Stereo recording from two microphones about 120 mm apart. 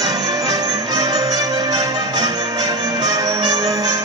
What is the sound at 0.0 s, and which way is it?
Music, 35° right (ahead or behind).